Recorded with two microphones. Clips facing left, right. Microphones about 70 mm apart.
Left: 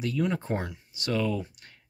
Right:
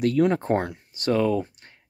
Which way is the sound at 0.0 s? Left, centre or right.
Right.